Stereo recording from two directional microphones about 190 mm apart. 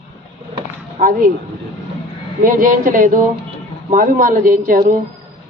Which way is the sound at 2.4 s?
45° right (ahead or behind).